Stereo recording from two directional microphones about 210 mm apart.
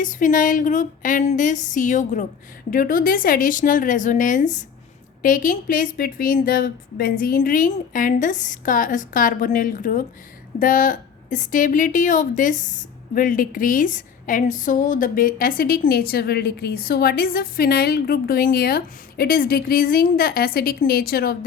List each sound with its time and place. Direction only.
0.0 s a woman's voice: 40° left (ahead or behind)